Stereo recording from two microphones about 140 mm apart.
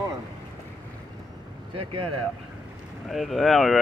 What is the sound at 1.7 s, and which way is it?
Speech, 40° right (ahead or behind).